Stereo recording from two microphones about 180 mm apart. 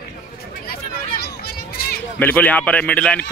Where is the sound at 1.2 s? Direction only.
55° left (ahead or behind).